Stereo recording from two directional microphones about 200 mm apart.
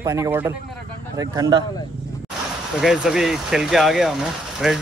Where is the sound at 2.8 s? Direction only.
Centre (ahead or behind).